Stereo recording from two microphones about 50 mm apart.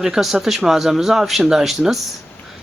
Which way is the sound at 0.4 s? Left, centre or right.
Centre.